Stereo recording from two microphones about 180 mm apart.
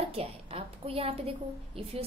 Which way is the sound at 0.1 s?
35° right (ahead or behind).